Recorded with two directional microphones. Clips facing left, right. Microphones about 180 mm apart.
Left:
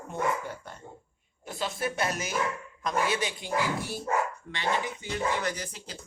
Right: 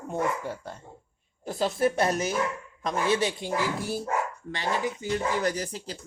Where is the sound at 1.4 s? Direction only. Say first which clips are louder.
Right 7 dB; 35° right (ahead or behind).